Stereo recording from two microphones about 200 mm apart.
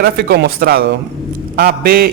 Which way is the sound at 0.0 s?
55° right (ahead or behind).